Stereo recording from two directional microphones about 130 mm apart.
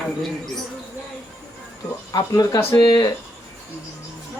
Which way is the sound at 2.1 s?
30° left (ahead or behind).